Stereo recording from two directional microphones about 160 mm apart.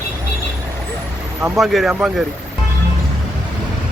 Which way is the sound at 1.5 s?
Centre (ahead or behind).